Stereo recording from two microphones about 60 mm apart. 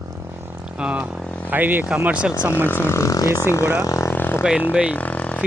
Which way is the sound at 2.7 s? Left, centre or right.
Left.